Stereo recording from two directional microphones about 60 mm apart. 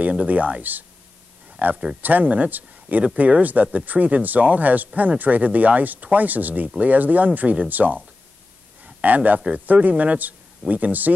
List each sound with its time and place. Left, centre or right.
0.0 s a man's voice: right